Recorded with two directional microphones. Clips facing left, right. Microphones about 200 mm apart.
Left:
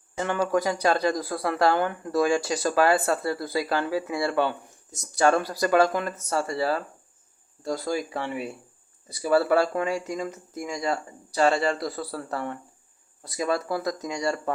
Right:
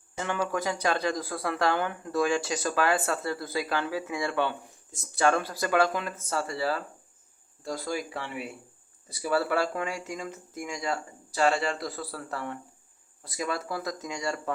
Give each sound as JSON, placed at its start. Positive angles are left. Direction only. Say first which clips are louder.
{"t": 0.3, "sound": "speech", "louder": "left 5 dB", "side_deg": 40}